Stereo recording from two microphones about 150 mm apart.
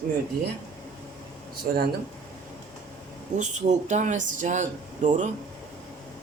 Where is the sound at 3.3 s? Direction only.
55° right (ahead or behind).